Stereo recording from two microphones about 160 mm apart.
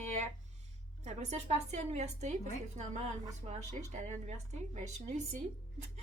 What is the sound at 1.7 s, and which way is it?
Speech, 45° right (ahead or behind).